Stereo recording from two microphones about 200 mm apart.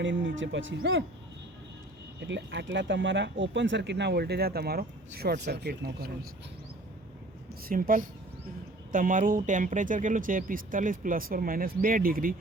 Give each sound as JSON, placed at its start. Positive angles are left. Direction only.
{"t": 0.0, "sound": "speech", "side_deg": -70}
{"t": 2.2, "sound": "speech", "side_deg": -65}
{"t": 7.7, "sound": "speech", "side_deg": -45}